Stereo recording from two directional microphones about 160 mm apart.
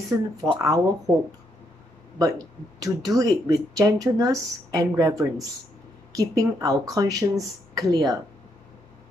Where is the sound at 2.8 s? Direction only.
20° right (ahead or behind).